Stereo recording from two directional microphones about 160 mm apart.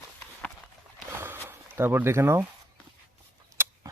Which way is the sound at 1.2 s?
15° right (ahead or behind).